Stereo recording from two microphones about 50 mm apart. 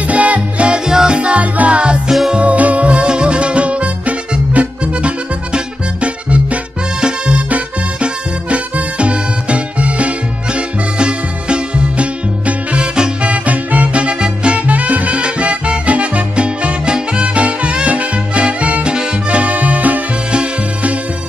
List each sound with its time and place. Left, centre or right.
0.0 s music: right
2.0 s music: centre
2.3 s music: right
13.3 s music: right